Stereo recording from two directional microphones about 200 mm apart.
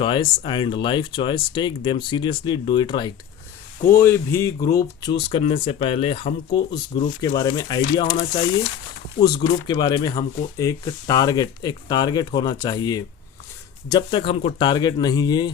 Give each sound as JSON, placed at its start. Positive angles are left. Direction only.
{"t": 0.0, "sound": "speech", "side_deg": 25}
{"t": 3.9, "sound": "speech", "side_deg": 10}